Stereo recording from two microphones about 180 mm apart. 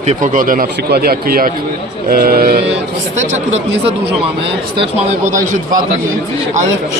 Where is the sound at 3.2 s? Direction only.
40° right (ahead or behind).